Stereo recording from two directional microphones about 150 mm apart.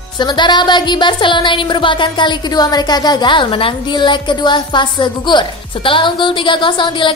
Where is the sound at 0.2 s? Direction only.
30° left (ahead or behind).